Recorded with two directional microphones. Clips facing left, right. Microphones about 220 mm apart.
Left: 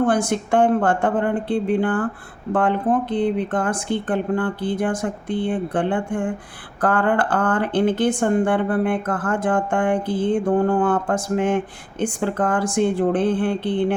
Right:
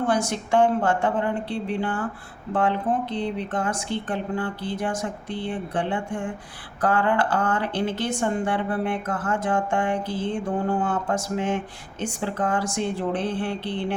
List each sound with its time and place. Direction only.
0.0 s speech: 55° left (ahead or behind)